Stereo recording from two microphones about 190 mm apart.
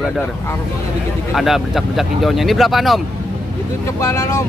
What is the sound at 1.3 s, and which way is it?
A man's voice, centre (ahead or behind).